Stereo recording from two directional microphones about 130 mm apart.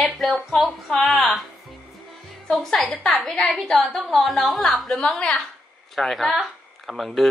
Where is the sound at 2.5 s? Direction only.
5° left (ahead or behind).